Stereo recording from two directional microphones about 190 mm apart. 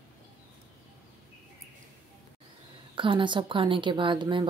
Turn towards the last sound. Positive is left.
turn(degrees=-25)  # may be behind; listen again after turning